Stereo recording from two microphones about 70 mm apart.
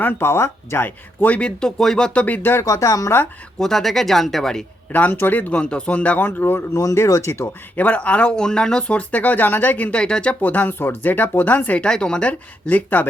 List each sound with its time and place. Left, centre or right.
0.0 s speech: left
0.9 s speech: left
2.2 s speech: left
2.6 s speech: left
3.6 s speech: centre
4.9 s speech: left
6.7 s speech: left
7.8 s speech: left
11.8 s speech: centre